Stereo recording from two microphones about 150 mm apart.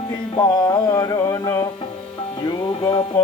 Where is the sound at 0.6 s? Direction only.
25° left (ahead or behind).